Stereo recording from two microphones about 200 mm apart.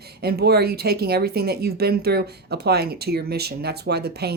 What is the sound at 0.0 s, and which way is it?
Speech, 50° right (ahead or behind).